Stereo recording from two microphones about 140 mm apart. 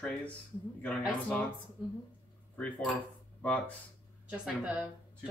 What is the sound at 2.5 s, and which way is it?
Speech, 10° left (ahead or behind).